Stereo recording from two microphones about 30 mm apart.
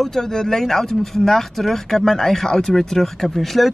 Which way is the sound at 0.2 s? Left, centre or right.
Centre.